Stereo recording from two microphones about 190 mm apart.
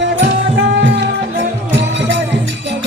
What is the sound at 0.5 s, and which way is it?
Music, 65° right (ahead or behind).